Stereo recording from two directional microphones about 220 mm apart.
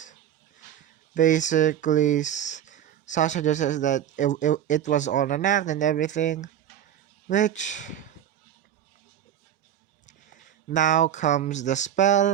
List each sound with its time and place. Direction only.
1.1 s speech: 35° left (ahead or behind)
10.1 s speech: 35° left (ahead or behind)